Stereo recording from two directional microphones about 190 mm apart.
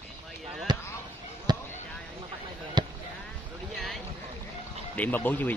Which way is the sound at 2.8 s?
25° right (ahead or behind).